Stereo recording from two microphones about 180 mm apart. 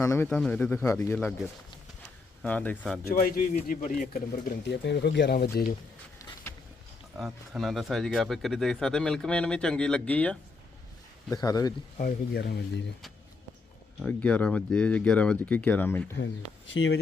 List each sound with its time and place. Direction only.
0.0 s speech: 15° left (ahead or behind)
0.3 s speech: 5° left (ahead or behind)
2.4 s speech: 10° left (ahead or behind)
3.1 s speech: 50° left (ahead or behind)
6.5 s vehicle: 15° left (ahead or behind)
7.1 s speech: centre (ahead or behind)
11.3 s a man's voice: 20° left (ahead or behind)
11.9 s speech: 50° left (ahead or behind)
12.4 s speech: 70° left (ahead or behind)
14.0 s speech: 10° left (ahead or behind)
16.7 s speech: 80° left